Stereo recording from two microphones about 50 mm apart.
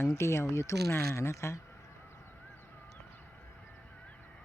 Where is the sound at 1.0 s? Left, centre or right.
Left.